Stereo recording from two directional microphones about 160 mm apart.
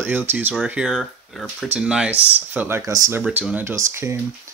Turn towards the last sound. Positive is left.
turn(degrees=-15)  # may be behind; listen again after turning